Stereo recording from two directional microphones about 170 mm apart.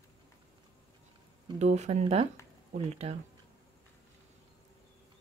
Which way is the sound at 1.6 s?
40° right (ahead or behind).